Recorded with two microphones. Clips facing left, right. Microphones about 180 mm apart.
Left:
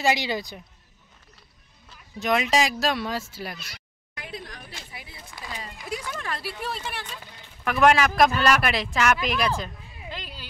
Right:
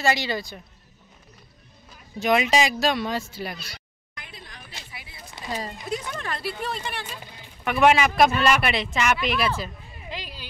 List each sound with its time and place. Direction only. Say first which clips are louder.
0.0 s speech: even; 15° left (ahead or behind)
2.1 s speech: right 2 dB; centre (ahead or behind)
3.5 s speech: right 3 dB; 30° right (ahead or behind)
4.5 s a sound: left 2 dB; 45° left (ahead or behind)
5.5 s speech: right 8 dB; 40° right (ahead or behind)
6.1 s speech: right 2 dB; 5° left (ahead or behind)
7.1 s a sound: right 2 dB; 15° right (ahead or behind)
7.6 s speech: right 1 dB; 5° right (ahead or behind)